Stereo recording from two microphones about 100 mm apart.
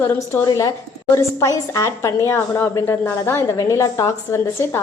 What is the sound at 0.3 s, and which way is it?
A woman's voice, 25° left (ahead or behind).